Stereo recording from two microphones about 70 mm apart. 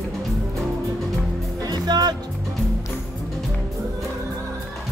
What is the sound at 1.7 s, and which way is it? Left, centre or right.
Music, right.